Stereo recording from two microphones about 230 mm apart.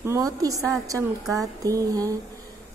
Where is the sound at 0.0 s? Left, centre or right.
Centre.